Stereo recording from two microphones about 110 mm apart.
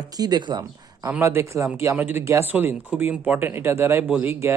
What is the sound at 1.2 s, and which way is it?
Speech, 25° right (ahead or behind).